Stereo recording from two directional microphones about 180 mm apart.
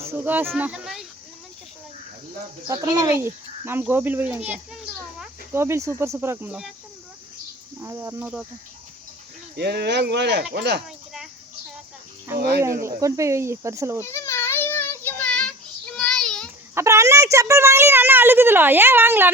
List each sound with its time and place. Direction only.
0.1 s speech: 10° right (ahead or behind)
2.6 s a woman's voice: 20° right (ahead or behind); by 6.7 s 5° right (ahead or behind)
7.8 s a woman's voice: 15° right (ahead or behind)
9.6 s speech: 65° right (ahead or behind)
10.8 s cricket: centre (ahead or behind)
12.4 s speech: 60° right (ahead or behind)
12.8 s a woman's voice: 15° right (ahead or behind)
14.0 s child singing: 15° left (ahead or behind)
16.7 s a woman's voice: 15° right (ahead or behind)